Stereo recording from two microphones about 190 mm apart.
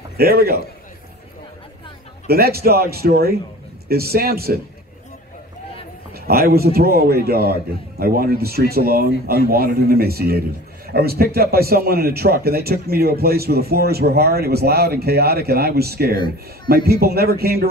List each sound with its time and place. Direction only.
0.2 s speech: 55° right (ahead or behind)
2.2 s a man's voice: 55° right (ahead or behind)
6.1 s a man's voice: 55° right (ahead or behind)